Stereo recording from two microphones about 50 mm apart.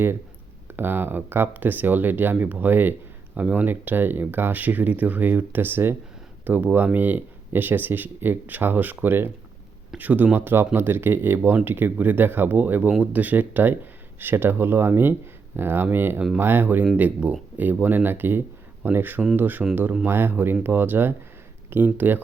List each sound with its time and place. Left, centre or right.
0.7 s speech: right
10.3 s speech: right